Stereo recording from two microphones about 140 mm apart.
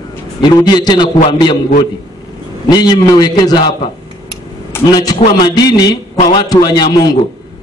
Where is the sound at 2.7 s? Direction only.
30° left (ahead or behind).